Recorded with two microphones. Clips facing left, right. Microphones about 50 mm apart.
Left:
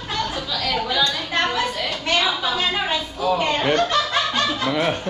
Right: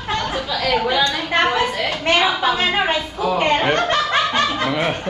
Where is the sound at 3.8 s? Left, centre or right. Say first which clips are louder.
Right 2 dB; right.